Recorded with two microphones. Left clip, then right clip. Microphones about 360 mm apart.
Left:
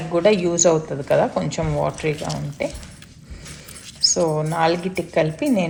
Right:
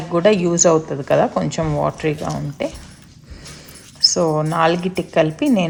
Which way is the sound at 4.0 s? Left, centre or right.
Right.